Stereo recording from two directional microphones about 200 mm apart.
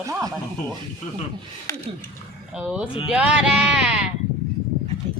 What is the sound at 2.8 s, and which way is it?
Speech, 25° left (ahead or behind).